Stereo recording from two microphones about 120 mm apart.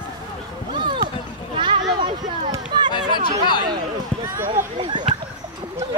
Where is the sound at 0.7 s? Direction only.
45° right (ahead or behind).